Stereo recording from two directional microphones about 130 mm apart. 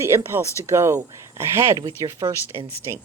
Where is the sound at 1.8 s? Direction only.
35° right (ahead or behind).